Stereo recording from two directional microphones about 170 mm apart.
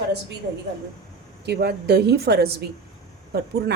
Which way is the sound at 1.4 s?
75° right (ahead or behind).